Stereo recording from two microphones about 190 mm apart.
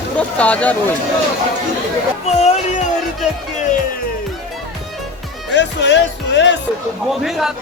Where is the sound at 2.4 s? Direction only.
35° left (ahead or behind).